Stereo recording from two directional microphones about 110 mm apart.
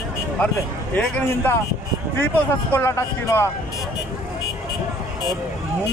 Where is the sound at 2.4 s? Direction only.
20° left (ahead or behind).